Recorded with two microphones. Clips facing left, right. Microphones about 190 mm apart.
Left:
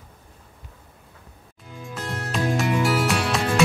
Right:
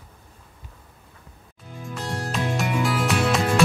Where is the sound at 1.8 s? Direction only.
Centre (ahead or behind).